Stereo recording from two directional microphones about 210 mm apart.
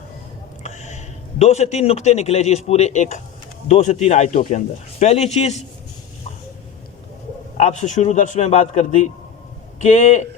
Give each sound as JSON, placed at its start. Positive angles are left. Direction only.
{"t": 0.6, "sound": "a man's voice", "side_deg": 35}
{"t": 7.5, "sound": "speech", "side_deg": 30}